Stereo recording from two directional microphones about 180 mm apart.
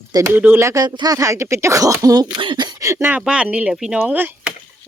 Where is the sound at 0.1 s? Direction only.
15° right (ahead or behind).